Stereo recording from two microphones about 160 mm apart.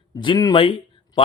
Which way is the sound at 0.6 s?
35° left (ahead or behind).